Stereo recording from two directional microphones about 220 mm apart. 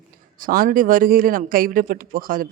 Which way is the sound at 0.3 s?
40° right (ahead or behind).